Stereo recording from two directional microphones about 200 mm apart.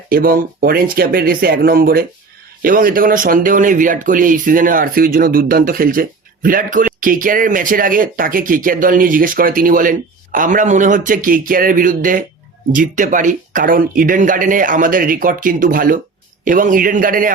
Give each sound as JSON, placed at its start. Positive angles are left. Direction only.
{"t": 0.1, "sound": "speech", "side_deg": -45}